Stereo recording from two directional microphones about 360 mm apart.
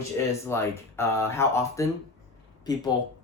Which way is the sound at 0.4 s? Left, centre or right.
Centre.